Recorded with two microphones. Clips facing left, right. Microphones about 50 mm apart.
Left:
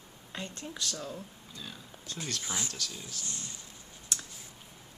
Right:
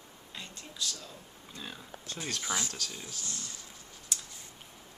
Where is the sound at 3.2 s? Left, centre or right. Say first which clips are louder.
Even; left.